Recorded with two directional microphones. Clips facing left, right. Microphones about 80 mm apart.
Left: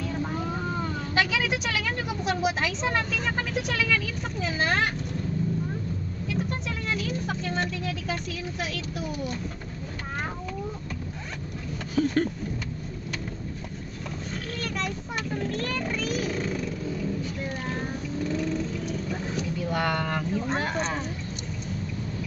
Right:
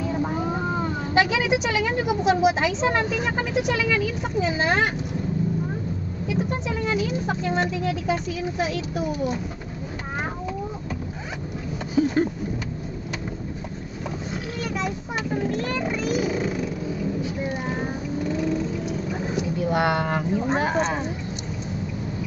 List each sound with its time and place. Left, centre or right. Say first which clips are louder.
0.0 s speech: right 5 dB; centre
6.2 s speech: right 5 dB; centre
11.9 s a sound: right 3 dB; centre
14.6 s vehicle: right 4 dB; centre